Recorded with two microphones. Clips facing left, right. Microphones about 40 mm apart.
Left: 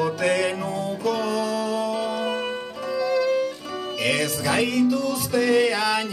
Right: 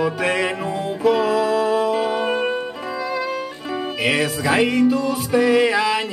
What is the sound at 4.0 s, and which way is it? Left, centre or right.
Music, right.